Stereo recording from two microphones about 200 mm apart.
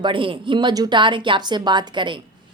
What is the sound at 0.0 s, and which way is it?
A woman's voice, 25° right (ahead or behind).